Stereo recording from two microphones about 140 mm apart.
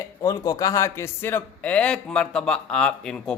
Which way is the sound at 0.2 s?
25° left (ahead or behind).